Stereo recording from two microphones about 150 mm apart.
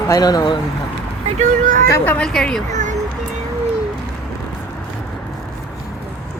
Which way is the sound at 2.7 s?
55° right (ahead or behind).